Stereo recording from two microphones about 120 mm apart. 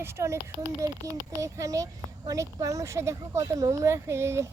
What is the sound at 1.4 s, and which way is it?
Speech, 25° right (ahead or behind).